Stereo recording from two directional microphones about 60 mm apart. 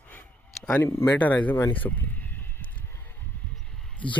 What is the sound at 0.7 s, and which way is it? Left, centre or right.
Speech, left.